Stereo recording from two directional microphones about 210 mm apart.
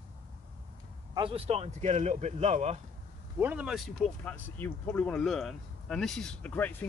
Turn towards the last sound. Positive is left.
turn(degrees=10)  # may be behind; listen again after turning